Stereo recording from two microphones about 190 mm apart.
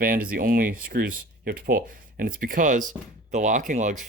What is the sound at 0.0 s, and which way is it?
Speech, 50° right (ahead or behind).